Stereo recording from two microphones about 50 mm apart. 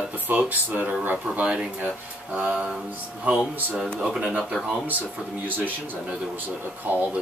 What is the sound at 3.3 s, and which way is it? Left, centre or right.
Speech, right.